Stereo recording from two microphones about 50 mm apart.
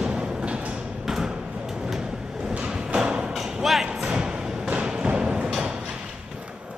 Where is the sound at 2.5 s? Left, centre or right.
Centre.